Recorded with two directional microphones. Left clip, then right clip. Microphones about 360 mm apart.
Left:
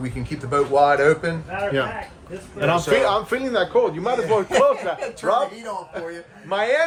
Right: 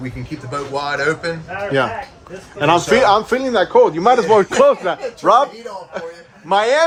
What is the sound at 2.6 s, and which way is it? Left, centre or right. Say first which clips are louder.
A man's voice: right 5 dB; centre.